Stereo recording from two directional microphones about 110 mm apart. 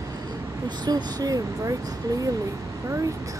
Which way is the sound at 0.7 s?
40° right (ahead or behind).